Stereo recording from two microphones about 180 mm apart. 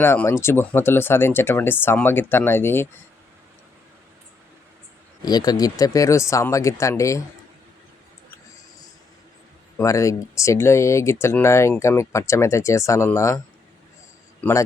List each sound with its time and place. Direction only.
0.0 s speech: 10° left (ahead or behind)
5.2 s speech: 20° left (ahead or behind)
9.7 s speech: 15° left (ahead or behind)
14.4 s speech: 10° left (ahead or behind)